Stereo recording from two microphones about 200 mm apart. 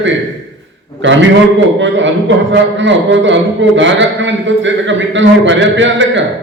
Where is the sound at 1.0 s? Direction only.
65° right (ahead or behind).